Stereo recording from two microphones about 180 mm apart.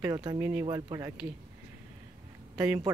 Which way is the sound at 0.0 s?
20° right (ahead or behind).